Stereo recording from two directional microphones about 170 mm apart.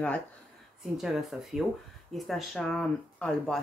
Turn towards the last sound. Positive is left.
turn(degrees=5)  # may be behind; listen again after turning